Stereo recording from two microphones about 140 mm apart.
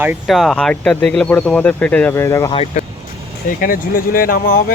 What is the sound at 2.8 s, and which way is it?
Speech, 60° left (ahead or behind).